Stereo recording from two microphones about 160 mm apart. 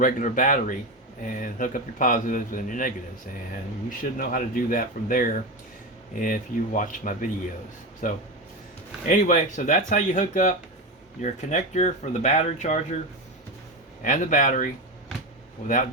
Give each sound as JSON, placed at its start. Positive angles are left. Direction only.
{"t": 0.0, "sound": "a man's voice", "side_deg": 55}
{"t": 14.0, "sound": "speech", "side_deg": 50}